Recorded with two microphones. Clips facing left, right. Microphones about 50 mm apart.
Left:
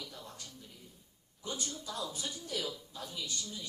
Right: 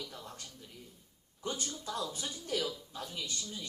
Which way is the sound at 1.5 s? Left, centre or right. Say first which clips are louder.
Right 2 dB; right.